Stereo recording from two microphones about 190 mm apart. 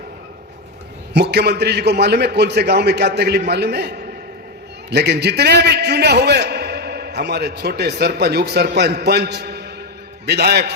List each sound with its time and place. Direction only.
1.1 s a man's voice: 60° right (ahead or behind)